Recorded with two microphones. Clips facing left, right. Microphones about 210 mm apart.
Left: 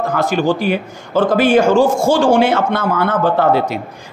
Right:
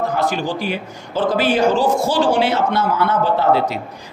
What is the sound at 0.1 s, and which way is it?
A man's voice, 50° left (ahead or behind).